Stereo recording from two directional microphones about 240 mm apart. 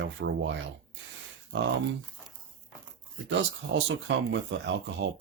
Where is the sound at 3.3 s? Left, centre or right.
Right.